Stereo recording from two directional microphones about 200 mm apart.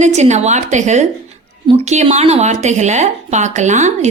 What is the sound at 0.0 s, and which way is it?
A woman's voice, 35° right (ahead or behind).